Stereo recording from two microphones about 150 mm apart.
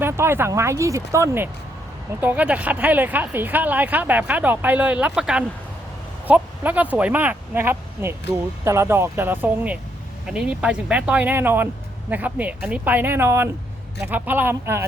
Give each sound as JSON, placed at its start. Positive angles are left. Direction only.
{"t": 0.0, "sound": "speech", "side_deg": -15}